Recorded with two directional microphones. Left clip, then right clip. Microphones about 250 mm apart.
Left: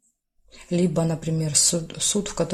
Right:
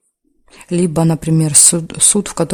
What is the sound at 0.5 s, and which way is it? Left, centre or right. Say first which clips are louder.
Speech: right 7 dB; right.